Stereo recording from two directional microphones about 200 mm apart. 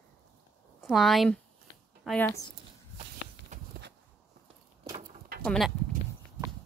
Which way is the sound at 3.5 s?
35° right (ahead or behind).